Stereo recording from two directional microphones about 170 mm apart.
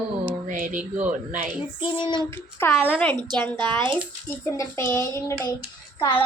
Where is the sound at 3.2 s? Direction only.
25° right (ahead or behind).